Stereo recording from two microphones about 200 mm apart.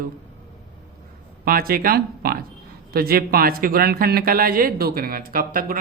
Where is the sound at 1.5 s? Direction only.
45° right (ahead or behind).